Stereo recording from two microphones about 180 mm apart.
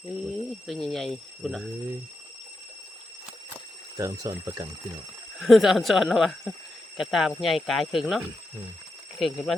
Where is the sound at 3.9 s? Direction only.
20° right (ahead or behind).